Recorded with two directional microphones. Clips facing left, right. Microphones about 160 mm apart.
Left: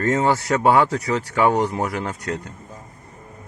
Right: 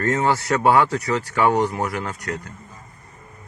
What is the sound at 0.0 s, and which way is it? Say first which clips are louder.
Speech: left 1 dB; 20° left (ahead or behind).